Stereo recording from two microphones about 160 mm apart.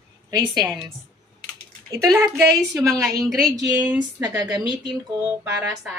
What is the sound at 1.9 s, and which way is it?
A woman's voice, 20° right (ahead or behind).